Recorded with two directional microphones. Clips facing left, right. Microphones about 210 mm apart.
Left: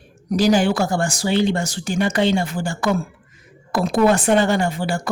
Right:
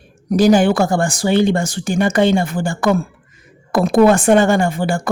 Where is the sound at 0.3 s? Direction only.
50° right (ahead or behind).